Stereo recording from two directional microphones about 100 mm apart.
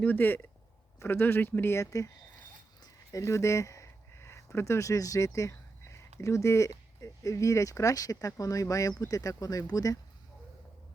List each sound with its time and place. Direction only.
0.0 s speech: 20° left (ahead or behind)
2.8 s a sound: 35° left (ahead or behind)
6.1 s speech: 30° left (ahead or behind)